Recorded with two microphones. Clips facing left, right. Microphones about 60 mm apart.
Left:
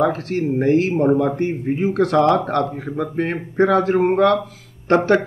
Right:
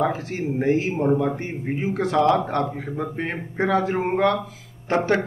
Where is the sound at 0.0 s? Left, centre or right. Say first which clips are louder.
Left 5 dB; left.